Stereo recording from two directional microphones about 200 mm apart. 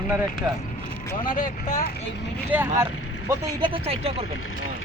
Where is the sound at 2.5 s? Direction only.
10° right (ahead or behind).